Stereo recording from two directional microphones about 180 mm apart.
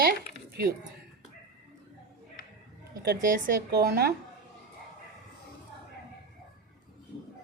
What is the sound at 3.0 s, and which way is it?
Speech, 60° right (ahead or behind).